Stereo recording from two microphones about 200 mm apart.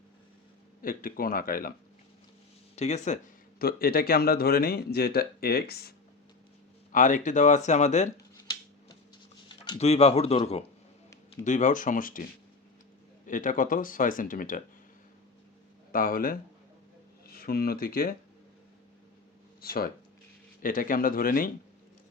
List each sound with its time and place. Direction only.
0.8 s speech: 45° left (ahead or behind)
2.7 s speech: 35° left (ahead or behind)
3.6 s speech: 50° left (ahead or behind)
6.9 s speech: 40° left (ahead or behind)
9.5 s speech: 25° left (ahead or behind); by 12.2 s 45° left (ahead or behind)
13.2 s speech: 40° left (ahead or behind)
15.9 s speech: 45° left (ahead or behind)
19.6 s speech: 50° left (ahead or behind)